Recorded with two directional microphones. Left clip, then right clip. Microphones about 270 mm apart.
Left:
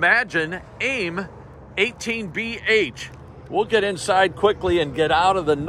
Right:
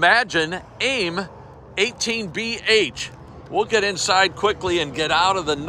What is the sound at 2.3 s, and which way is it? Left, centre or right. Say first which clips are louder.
Speech: right 1 dB; centre.